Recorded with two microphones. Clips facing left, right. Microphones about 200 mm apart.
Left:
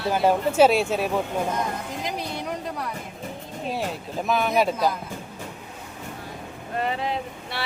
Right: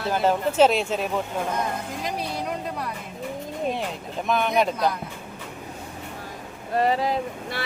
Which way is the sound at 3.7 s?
5° left (ahead or behind).